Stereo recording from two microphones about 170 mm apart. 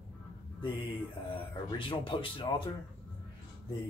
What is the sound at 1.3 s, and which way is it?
Speech, 30° left (ahead or behind).